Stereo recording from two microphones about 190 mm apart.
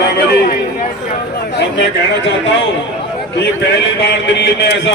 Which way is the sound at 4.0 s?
70° left (ahead or behind).